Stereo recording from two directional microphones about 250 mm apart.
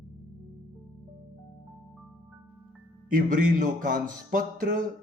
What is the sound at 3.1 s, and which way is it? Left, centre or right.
Music, right.